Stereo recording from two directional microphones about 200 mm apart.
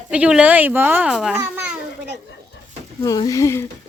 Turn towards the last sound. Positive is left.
turn(degrees=15)  # may be behind; listen again after turning